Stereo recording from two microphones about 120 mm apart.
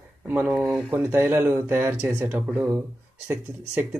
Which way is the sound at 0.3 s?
15° right (ahead or behind).